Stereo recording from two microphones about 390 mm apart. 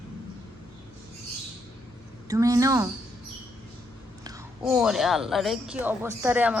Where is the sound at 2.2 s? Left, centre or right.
Centre.